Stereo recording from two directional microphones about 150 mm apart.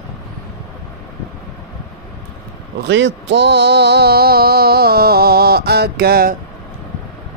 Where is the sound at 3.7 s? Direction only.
90° right.